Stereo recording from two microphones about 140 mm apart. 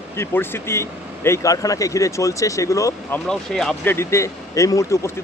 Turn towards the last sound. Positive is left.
turn(degrees=20)  # may be behind; listen again after turning